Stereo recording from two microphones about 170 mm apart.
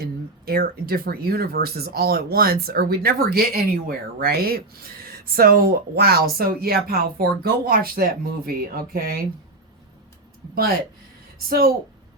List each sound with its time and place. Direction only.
0.0 s speech: 60° right (ahead or behind)
10.5 s speech: 60° right (ahead or behind)